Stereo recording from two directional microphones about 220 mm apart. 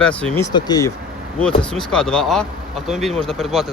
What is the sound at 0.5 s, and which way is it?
Speech, 20° left (ahead or behind).